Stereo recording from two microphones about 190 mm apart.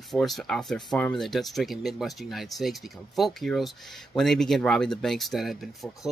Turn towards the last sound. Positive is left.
turn(degrees=0)  # may be behind; listen again after turning